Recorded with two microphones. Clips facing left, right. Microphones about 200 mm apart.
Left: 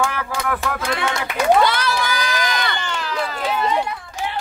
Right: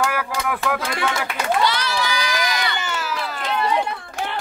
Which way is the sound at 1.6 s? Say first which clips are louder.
Left 3 dB; 50° left (ahead or behind).